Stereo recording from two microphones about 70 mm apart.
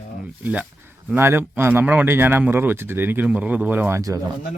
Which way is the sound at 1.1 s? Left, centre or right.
Right.